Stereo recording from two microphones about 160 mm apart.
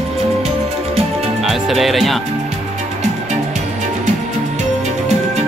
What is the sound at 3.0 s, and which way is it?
Music, 45° right (ahead or behind).